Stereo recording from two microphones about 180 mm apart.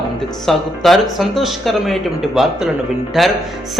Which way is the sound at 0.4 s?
Centre (ahead or behind).